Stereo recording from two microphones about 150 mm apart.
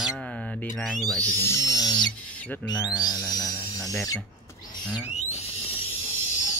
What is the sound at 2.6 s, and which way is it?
Speech, 25° left (ahead or behind).